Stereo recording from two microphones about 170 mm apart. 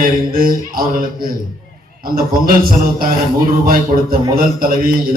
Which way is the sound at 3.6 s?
55° right (ahead or behind).